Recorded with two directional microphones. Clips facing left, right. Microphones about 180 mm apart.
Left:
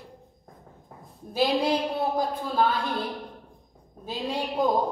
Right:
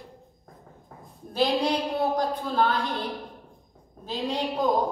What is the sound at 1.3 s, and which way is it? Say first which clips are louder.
A woman's voice: even; 5° left (ahead or behind).